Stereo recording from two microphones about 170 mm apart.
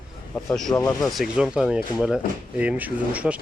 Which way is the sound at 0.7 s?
20° left (ahead or behind).